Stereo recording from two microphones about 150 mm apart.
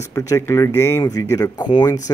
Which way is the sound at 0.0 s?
20° left (ahead or behind).